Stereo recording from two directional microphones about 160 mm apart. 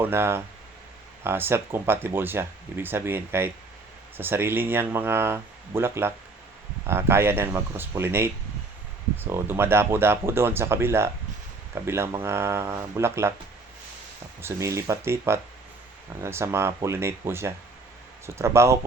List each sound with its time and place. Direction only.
0.0 s speech: 15° right (ahead or behind)
14.4 s speech: 20° right (ahead or behind)